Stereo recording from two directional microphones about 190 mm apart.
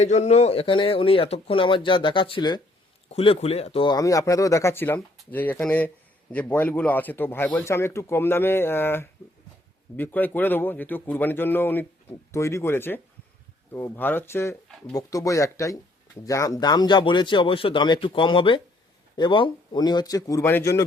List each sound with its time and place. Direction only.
0.0 s speech: 35° left (ahead or behind); by 20.8 s 15° left (ahead or behind)